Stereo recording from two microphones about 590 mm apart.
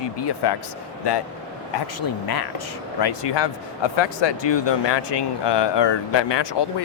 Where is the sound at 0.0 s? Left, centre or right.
Left.